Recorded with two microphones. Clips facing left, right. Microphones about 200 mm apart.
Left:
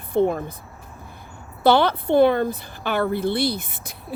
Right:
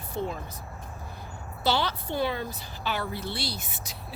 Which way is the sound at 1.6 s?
55° left (ahead or behind).